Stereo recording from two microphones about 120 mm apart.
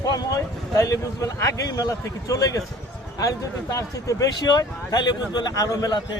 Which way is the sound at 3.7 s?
30° left (ahead or behind).